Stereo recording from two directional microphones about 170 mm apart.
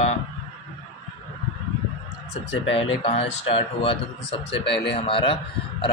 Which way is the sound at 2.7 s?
30° left (ahead or behind).